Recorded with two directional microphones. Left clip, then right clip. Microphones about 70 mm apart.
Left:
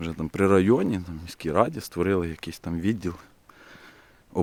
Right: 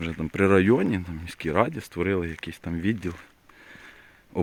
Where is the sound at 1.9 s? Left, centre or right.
Left.